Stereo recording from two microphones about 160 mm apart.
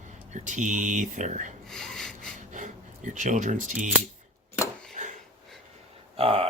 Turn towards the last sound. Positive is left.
turn(degrees=-35)  # may be behind; listen again after turning